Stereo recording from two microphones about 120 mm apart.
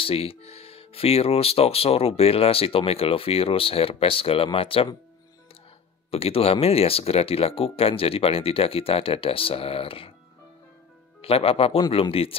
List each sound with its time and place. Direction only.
0.0 s speech: 55° left (ahead or behind)
6.1 s speech: 55° left (ahead or behind)
11.1 s speech: 55° left (ahead or behind)